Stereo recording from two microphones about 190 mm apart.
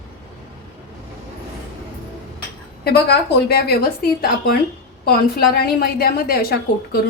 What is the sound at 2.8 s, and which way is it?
Speech, 55° left (ahead or behind).